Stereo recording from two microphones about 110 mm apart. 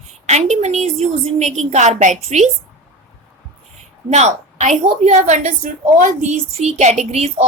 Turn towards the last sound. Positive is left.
turn(degrees=-75)  # may be behind; listen again after turning